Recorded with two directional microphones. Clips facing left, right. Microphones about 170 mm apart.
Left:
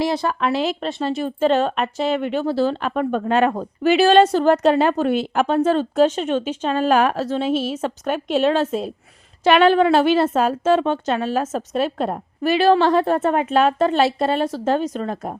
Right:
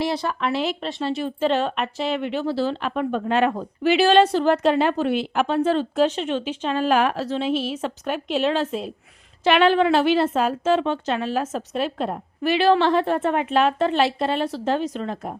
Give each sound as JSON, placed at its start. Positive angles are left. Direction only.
{"t": 0.0, "sound": "speech", "side_deg": 45}